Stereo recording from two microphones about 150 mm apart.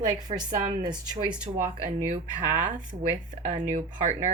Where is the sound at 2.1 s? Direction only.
55° right (ahead or behind).